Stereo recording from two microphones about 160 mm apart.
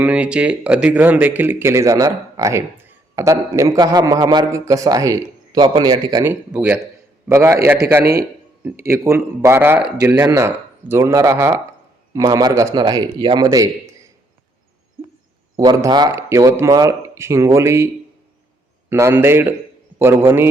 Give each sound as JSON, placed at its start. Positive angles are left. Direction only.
{"t": 0.0, "sound": "speech", "side_deg": -10}
{"t": 6.2, "sound": "speech", "side_deg": -10}
{"t": 8.8, "sound": "speech", "side_deg": -15}
{"t": 9.8, "sound": "speech", "side_deg": -90}
{"t": 10.2, "sound": "speech", "side_deg": -20}
{"t": 15.5, "sound": "speech", "side_deg": -25}
{"t": 18.9, "sound": "speech", "side_deg": -15}